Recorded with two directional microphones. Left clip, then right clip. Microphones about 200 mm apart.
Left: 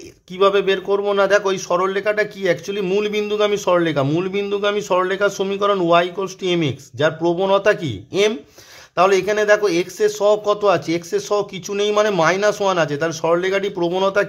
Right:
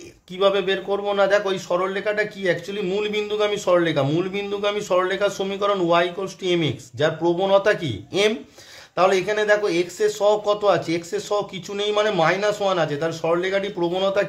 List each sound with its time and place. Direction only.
0.4 s a man's voice: 30° left (ahead or behind)